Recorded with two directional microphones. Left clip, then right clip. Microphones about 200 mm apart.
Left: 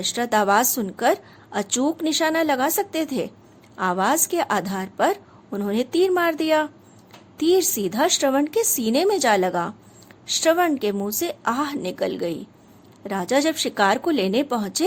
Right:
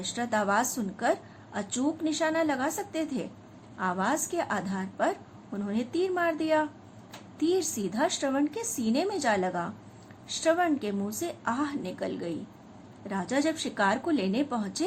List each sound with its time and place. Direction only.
0.0 s a woman's voice: 55° left (ahead or behind)